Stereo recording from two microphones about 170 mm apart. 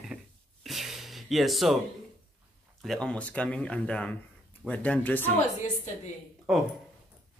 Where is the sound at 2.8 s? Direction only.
5° left (ahead or behind).